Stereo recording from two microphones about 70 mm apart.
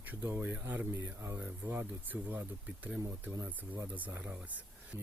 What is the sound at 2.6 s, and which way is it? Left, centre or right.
Speech, centre.